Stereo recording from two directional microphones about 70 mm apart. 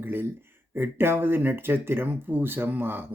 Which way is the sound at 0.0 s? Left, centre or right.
Right.